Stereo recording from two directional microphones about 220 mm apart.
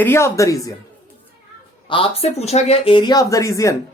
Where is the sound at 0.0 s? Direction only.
10° left (ahead or behind).